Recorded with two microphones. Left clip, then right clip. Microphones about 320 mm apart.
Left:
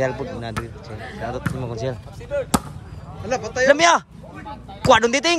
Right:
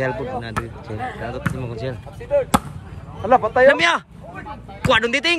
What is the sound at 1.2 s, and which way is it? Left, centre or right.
Speech, centre.